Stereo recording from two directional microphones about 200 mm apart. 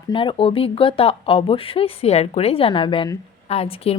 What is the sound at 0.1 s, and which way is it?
Speech, 25° left (ahead or behind).